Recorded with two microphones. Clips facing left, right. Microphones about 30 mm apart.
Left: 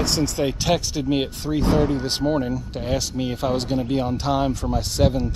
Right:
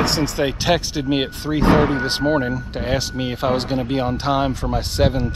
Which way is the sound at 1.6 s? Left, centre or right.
Right.